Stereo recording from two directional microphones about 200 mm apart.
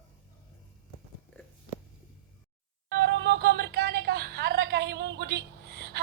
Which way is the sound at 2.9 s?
55° right (ahead or behind).